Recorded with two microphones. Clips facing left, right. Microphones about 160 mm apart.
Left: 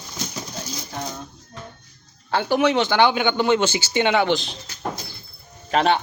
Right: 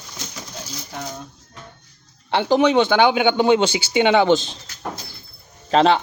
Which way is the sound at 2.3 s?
20° right (ahead or behind).